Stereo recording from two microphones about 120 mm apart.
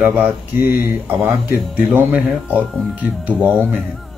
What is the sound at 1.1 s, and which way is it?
Speech, centre (ahead or behind).